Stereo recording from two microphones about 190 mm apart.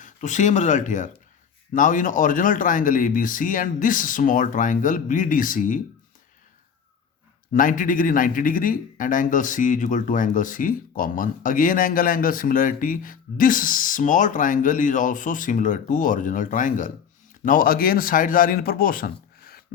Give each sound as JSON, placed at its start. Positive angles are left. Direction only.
{"t": 0.0, "sound": "speech", "side_deg": 40}
{"t": 7.5, "sound": "speech", "side_deg": 45}